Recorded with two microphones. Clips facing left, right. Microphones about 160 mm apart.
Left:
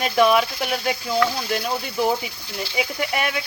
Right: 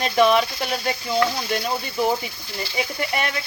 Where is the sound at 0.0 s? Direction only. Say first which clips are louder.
Even; 5° left (ahead or behind).